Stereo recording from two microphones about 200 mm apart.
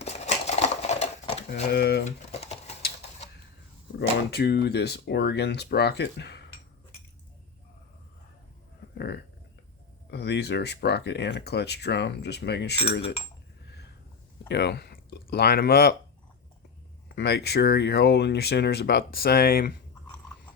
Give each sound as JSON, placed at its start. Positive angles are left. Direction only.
{"t": 0.0, "sound": "a sound", "side_deg": 35}
{"t": 1.6, "sound": "speech", "side_deg": 55}
{"t": 2.0, "sound": "typing", "side_deg": 30}
{"t": 4.3, "sound": "speech", "side_deg": 55}
{"t": 10.1, "sound": "speech", "side_deg": 55}
{"t": 14.4, "sound": "speech", "side_deg": 55}
{"t": 17.2, "sound": "speech", "side_deg": 55}